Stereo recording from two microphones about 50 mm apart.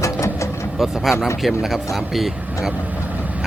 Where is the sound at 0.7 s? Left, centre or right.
Centre.